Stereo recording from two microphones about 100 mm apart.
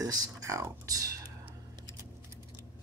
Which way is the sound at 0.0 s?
35° right (ahead or behind).